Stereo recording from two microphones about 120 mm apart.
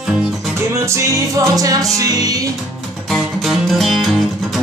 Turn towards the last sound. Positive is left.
turn(degrees=0)  # may be behind; listen again after turning